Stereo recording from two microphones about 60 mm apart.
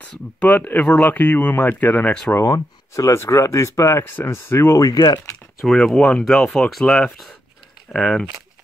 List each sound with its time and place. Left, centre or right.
0.0 s speech: left
2.4 s speech: left
4.0 s speech: left
4.7 s speech: left
5.6 s speech: centre